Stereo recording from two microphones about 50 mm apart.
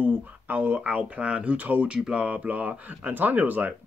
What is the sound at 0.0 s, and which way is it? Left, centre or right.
Speech, right.